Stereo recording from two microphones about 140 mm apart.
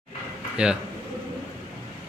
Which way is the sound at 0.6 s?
5° right (ahead or behind).